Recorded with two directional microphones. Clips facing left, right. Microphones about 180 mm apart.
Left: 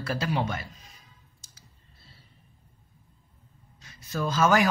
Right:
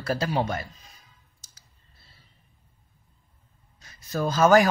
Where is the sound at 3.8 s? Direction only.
40° right (ahead or behind).